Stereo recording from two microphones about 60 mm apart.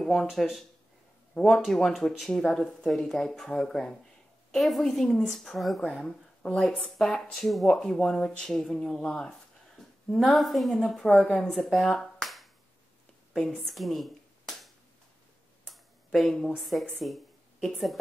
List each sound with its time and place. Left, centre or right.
0.0 s a woman's voice: centre
1.7 s a woman's voice: centre; by 6.9 s left
7.0 s a woman's voice: centre
13.4 s a sound: centre
16.5 s a woman's voice: centre
17.0 s a sound: centre